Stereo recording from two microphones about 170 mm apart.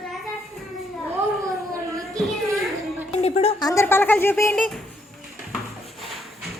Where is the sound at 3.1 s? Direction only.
40° left (ahead or behind).